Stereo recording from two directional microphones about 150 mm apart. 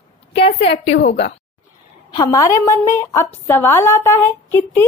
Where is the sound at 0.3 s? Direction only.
45° left (ahead or behind).